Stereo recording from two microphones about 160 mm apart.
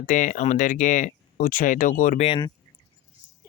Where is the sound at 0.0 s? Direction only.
55° left (ahead or behind).